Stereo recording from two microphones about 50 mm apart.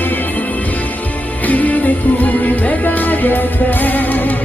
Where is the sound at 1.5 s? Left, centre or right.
Left.